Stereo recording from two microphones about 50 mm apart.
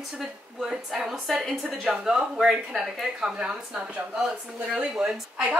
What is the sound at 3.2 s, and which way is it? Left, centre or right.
A woman's voice, centre.